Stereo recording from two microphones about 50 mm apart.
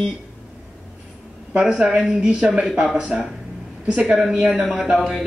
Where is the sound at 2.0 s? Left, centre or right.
Centre.